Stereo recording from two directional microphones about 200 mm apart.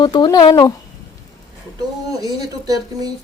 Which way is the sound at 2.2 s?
20° right (ahead or behind).